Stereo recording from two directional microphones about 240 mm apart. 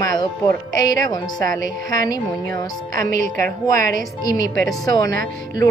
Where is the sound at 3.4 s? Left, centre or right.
Right.